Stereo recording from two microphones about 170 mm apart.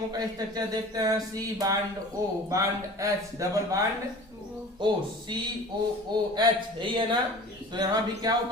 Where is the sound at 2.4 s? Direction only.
20° right (ahead or behind).